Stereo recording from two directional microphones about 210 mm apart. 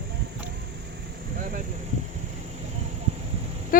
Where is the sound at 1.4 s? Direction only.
40° right (ahead or behind).